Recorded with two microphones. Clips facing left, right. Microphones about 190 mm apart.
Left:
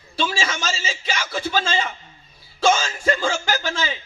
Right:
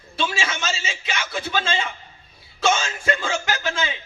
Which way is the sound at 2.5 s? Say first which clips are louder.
Left 3 dB; 30° left (ahead or behind).